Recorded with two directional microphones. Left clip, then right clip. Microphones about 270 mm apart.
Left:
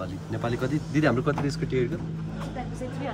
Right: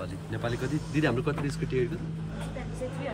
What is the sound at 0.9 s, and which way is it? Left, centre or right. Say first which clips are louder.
Speech: left 4 dB; left.